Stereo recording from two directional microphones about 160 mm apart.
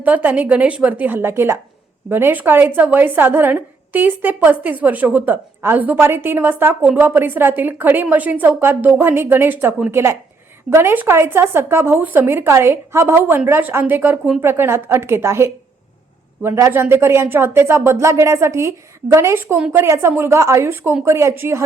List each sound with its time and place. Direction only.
0.0 s a woman's voice: 10° right (ahead or behind)